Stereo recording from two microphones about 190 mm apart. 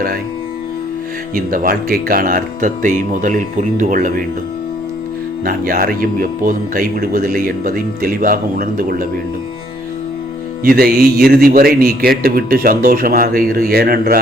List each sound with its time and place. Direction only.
1.5 s speech: 50° right (ahead or behind)
5.5 s speech: 50° right (ahead or behind)
10.6 s speech: 50° right (ahead or behind)